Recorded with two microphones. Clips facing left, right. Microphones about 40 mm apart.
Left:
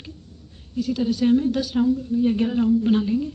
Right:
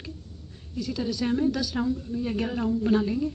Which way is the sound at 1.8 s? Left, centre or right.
Centre.